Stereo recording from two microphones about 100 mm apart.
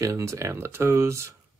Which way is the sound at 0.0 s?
30° right (ahead or behind).